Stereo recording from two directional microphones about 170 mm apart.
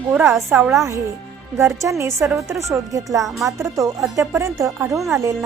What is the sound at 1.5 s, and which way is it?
A woman's voice, 15° right (ahead or behind).